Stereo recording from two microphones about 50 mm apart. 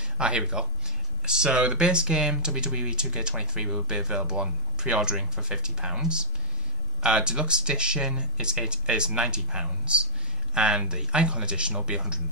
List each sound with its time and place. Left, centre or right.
0.0 s speech: right